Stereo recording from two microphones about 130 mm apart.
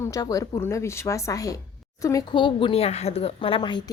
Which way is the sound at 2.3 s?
40° left (ahead or behind).